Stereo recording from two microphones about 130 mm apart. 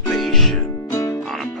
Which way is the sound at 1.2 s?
Centre (ahead or behind).